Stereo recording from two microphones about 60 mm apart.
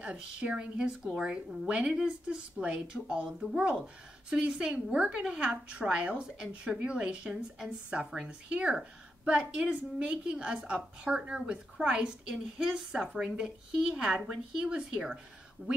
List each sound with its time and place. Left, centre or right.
0.0 s a woman's voice: centre